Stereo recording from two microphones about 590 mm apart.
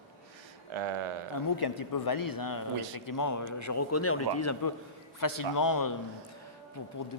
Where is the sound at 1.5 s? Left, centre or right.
Left.